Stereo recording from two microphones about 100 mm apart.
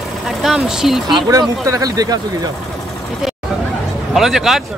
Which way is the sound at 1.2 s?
35° right (ahead or behind).